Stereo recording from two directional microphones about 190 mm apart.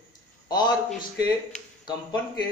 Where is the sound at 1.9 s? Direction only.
25° left (ahead or behind).